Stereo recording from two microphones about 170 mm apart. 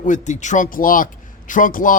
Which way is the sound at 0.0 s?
45° left (ahead or behind).